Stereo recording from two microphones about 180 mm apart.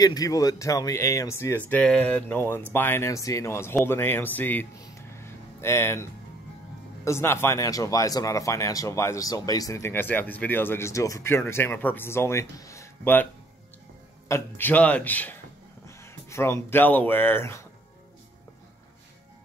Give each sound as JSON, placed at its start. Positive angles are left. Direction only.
{"t": 0.0, "sound": "speech", "side_deg": 20}
{"t": 7.1, "sound": "speech", "side_deg": 15}